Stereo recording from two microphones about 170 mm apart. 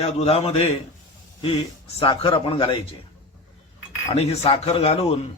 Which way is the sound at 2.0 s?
35° left (ahead or behind).